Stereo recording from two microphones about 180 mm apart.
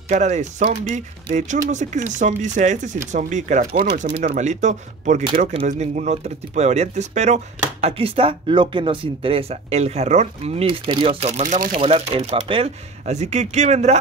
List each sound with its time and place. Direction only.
0.1 s speech: 40° right (ahead or behind)
3.7 s speech: 55° right (ahead or behind)
11.8 s speech: 30° right (ahead or behind)